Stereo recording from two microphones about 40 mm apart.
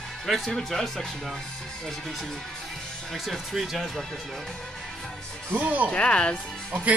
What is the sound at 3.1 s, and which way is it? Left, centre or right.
Speech, centre.